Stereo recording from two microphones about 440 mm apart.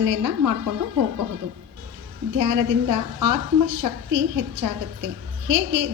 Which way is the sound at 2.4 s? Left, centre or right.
Right.